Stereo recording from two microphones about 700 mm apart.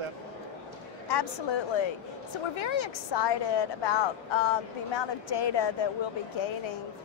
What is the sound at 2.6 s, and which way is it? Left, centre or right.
A woman's voice, left.